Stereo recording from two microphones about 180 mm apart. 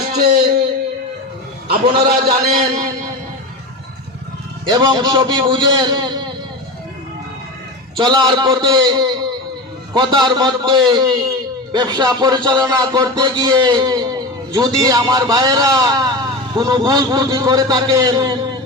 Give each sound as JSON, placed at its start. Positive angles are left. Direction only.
{"t": 0.1, "sound": "a sound", "side_deg": -60}
{"t": 2.0, "sound": "a man's voice", "side_deg": -60}
{"t": 2.5, "sound": "a man's voice", "side_deg": -40}
{"t": 4.6, "sound": "speech", "side_deg": -25}
{"t": 7.9, "sound": "speech", "side_deg": -25}